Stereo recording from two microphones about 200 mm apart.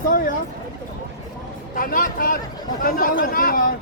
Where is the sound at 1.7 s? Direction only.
45° left (ahead or behind).